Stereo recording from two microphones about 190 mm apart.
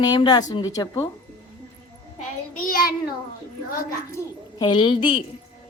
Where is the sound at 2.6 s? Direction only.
50° left (ahead or behind).